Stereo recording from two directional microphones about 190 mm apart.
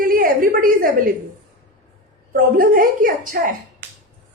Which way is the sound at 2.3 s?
50° right (ahead or behind).